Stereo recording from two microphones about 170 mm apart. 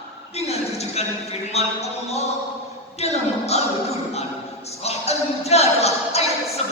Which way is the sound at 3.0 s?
40° left (ahead or behind).